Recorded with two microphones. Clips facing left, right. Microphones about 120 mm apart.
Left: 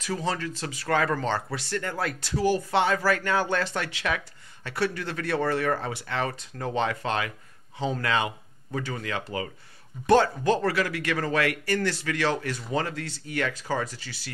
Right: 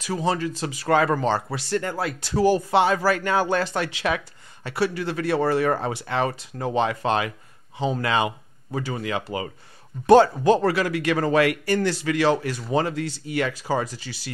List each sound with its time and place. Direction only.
0.0 s a man's voice: 15° right (ahead or behind)
2.3 s speech: 30° right (ahead or behind)
2.7 s a man's voice: 15° right (ahead or behind)
4.6 s a man's voice: 10° right (ahead or behind)
5.7 s a man's voice: 25° right (ahead or behind)